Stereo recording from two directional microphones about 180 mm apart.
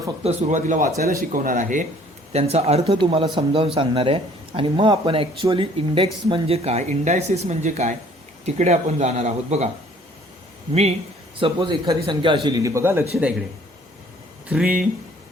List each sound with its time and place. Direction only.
0.2 s speech: 40° right (ahead or behind)
2.3 s speech: 35° right (ahead or behind)
11.3 s speech: 30° right (ahead or behind)
14.5 s speech: 5° right (ahead or behind)